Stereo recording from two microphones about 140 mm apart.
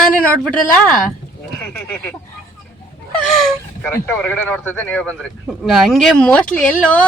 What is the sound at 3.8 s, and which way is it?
Speech, 10° left (ahead or behind).